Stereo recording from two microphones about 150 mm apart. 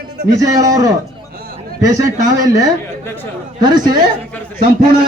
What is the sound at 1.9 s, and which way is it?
Speech, 25° right (ahead or behind).